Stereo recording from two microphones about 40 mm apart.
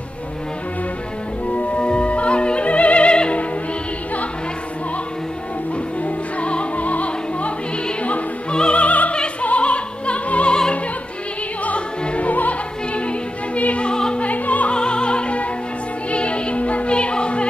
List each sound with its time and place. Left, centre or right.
1.5 s opera: left
6.0 s music: left
8.0 s opera: left
8.5 s music: left
9.1 s music: left
9.5 s opera: left
11.6 s opera: left
13.8 s music: left
14.2 s music: left
14.7 s opera: left